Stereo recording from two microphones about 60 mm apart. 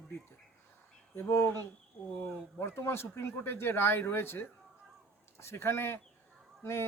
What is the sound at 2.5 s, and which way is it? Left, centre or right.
Speech, left.